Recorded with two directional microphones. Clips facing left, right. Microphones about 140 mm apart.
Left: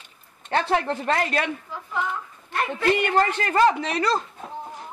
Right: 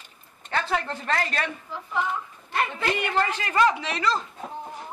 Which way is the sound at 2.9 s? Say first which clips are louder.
Left 8 dB; 50° left (ahead or behind).